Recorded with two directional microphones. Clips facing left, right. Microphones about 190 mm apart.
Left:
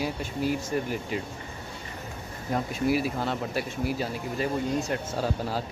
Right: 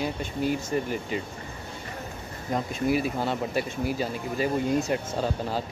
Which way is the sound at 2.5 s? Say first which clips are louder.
Even; 5° left (ahead or behind).